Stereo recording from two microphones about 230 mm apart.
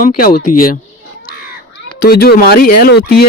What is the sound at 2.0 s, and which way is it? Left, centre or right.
Speech, left.